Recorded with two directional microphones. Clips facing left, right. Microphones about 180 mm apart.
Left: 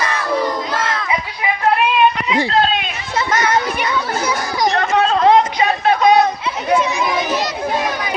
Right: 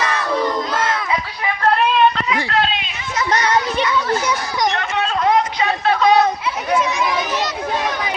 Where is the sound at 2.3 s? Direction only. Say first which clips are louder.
Left 4 dB; 25° left (ahead or behind).